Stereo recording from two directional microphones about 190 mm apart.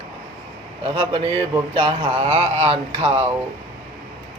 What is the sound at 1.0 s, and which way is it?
Speech, 30° right (ahead or behind).